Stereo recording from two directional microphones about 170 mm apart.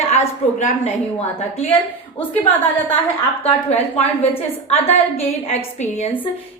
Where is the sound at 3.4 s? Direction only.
40° left (ahead or behind).